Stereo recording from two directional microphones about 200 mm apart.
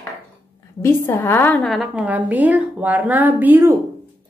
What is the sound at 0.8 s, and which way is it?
A woman's voice, 10° left (ahead or behind).